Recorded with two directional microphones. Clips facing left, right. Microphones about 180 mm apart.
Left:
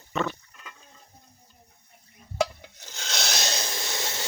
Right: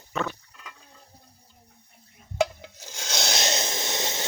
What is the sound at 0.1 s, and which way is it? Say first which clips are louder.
Pig: left 1 dB; centre (ahead or behind).